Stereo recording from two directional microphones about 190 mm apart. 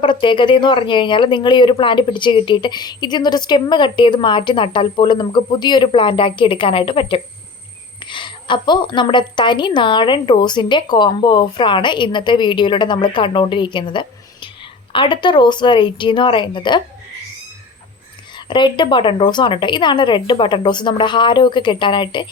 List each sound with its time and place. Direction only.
0.0 s speech: 25° left (ahead or behind)
18.4 s speech: 25° left (ahead or behind)